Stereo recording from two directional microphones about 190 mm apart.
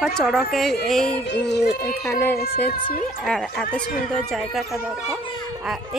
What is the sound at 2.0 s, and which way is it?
Speech, 15° left (ahead or behind).